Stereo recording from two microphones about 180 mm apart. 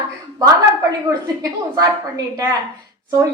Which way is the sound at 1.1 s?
20° right (ahead or behind).